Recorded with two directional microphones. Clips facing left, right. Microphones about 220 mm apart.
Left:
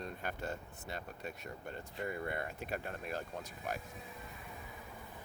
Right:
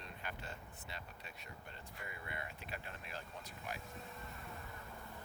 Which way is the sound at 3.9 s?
Centre (ahead or behind).